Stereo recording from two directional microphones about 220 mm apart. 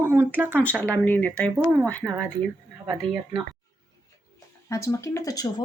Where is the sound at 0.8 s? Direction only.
5° left (ahead or behind).